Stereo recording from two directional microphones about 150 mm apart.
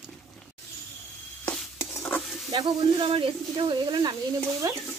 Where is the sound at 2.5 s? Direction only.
30° right (ahead or behind).